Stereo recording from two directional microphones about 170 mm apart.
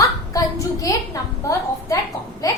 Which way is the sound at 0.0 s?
20° left (ahead or behind).